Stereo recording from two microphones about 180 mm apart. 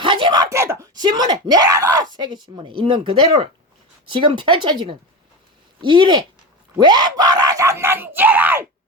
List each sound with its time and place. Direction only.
0.0 s screaming: 25° right (ahead or behind)
4.1 s speech: 25° right (ahead or behind); by 8.6 s 10° right (ahead or behind)